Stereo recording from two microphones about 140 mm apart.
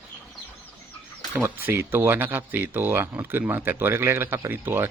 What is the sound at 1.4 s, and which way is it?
Speech, 15° right (ahead or behind).